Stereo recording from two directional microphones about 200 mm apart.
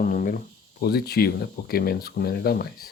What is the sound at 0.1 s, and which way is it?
Speech, 45° left (ahead or behind).